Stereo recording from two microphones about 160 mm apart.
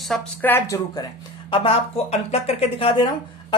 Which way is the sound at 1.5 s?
35° left (ahead or behind).